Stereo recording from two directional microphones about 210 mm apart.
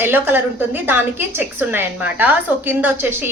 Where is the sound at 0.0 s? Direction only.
10° right (ahead or behind).